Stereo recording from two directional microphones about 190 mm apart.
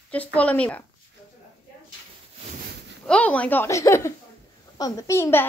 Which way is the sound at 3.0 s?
5° left (ahead or behind).